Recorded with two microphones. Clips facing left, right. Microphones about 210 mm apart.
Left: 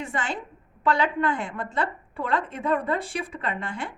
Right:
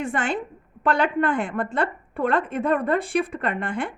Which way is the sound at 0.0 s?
55° right (ahead or behind).